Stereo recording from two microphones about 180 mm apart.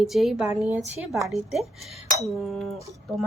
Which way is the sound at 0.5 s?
15° right (ahead or behind).